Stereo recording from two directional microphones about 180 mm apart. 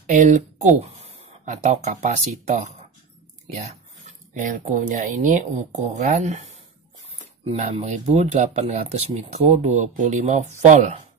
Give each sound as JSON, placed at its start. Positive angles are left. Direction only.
{"t": 0.0, "sound": "speech", "side_deg": -45}
{"t": 4.3, "sound": "speech", "side_deg": -45}